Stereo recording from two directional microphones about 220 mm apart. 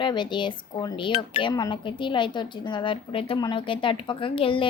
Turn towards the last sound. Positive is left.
turn(degrees=25)  # may be behind; listen again after turning